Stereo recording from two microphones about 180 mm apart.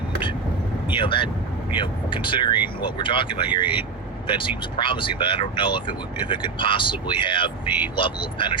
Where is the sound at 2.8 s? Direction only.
25° left (ahead or behind).